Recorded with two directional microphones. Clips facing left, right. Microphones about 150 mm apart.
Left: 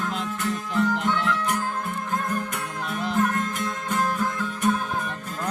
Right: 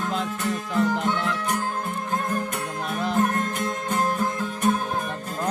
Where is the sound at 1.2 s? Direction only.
35° right (ahead or behind).